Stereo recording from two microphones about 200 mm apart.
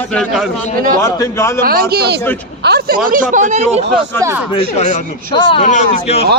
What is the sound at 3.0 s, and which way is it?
Speech, 40° right (ahead or behind).